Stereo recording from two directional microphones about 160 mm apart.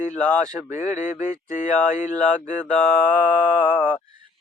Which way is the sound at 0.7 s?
50° left (ahead or behind).